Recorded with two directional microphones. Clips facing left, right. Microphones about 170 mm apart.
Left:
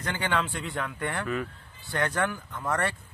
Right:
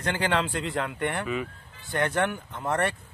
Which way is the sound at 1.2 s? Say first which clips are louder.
Right 1 dB; 10° right (ahead or behind).